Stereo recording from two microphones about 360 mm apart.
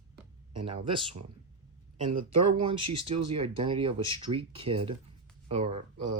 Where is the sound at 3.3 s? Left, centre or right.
Centre.